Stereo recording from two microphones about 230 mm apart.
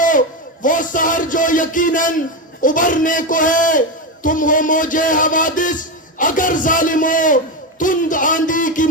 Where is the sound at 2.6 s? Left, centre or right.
Left.